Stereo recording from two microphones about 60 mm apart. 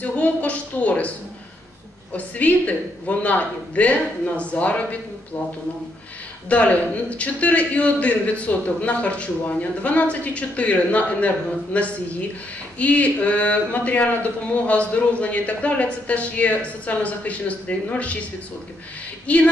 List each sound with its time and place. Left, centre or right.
0.0 s speech: left
2.1 s speech: left
6.5 s speech: left
19.2 s speech: left